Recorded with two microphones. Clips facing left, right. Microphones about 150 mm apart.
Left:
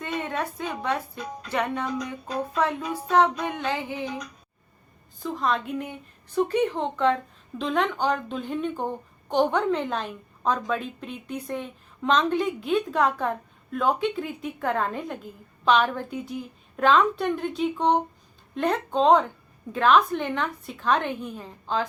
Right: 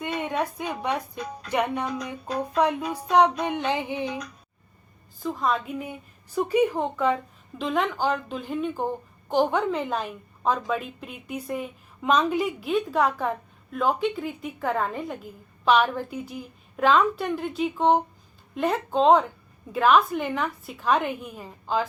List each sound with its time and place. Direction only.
0.0 s a woman's voice: 15° right (ahead or behind)
1.5 s a sound: 15° right (ahead or behind)
5.2 s a woman's voice: centre (ahead or behind)